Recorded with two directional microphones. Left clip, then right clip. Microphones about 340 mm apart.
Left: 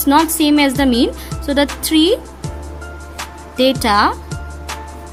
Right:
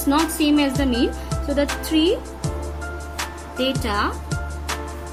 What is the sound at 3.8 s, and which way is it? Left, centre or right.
Speech, left.